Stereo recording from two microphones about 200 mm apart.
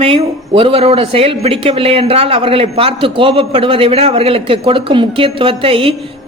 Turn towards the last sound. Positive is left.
turn(degrees=-25)  # may be behind; listen again after turning